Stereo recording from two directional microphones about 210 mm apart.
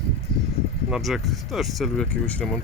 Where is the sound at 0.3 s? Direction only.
50° left (ahead or behind).